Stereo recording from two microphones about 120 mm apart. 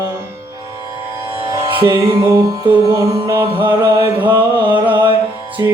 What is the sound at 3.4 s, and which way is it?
Mantra, 45° right (ahead or behind).